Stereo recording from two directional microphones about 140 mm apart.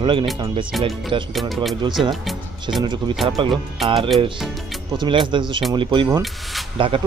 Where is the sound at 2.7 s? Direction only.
35° right (ahead or behind).